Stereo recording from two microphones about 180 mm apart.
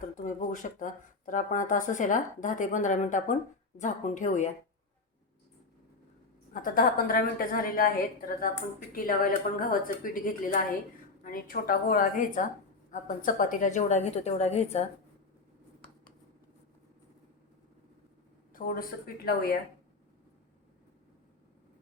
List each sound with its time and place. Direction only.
0.2 s a woman's voice: 45° left (ahead or behind)
6.5 s a woman's voice: 50° left (ahead or behind)
18.5 s speech: 55° left (ahead or behind)